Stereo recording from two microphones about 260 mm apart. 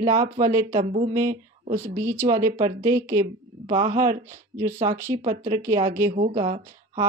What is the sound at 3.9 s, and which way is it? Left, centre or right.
Speech, right.